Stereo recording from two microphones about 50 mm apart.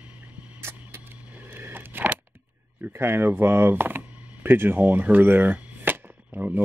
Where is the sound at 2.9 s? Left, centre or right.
Right.